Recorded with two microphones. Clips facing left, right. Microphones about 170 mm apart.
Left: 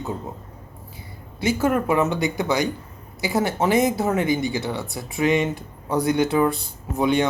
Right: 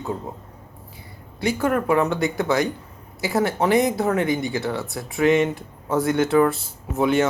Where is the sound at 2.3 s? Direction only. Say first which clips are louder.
Right 1 dB; centre (ahead or behind).